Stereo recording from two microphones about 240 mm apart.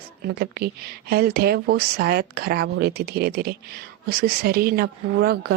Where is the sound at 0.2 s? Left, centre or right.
Right.